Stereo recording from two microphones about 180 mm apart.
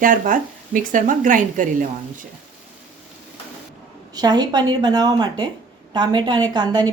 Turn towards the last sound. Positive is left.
turn(degrees=-25)  # may be behind; listen again after turning